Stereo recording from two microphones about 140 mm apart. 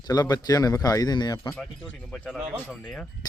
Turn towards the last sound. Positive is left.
turn(degrees=10)  # may be behind; listen again after turning